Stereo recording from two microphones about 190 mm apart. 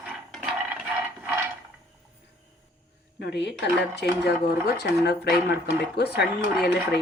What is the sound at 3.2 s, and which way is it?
Speech, 60° left (ahead or behind).